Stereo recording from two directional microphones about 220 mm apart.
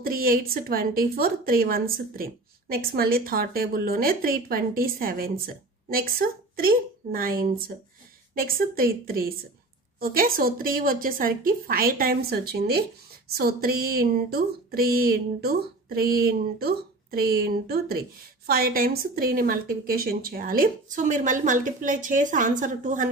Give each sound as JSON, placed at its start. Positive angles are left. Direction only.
{"t": 0.0, "sound": "a woman's voice", "side_deg": -40}